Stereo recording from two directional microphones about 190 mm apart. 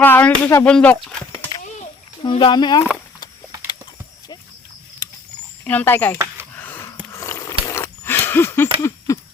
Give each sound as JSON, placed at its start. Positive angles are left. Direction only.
{"t": 0.0, "sound": "speech", "side_deg": 10}
{"t": 2.2, "sound": "speech", "side_deg": 25}
{"t": 5.6, "sound": "speech", "side_deg": 10}
{"t": 6.6, "sound": "a sound", "side_deg": 10}